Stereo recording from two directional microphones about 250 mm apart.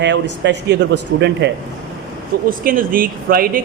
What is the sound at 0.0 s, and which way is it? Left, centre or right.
Speech, right.